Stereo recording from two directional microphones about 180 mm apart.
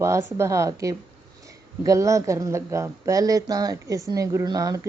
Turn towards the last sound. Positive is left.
turn(degrees=-20)  # may be behind; listen again after turning